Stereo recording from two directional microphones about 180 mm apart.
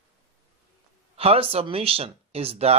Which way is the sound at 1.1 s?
35° right (ahead or behind).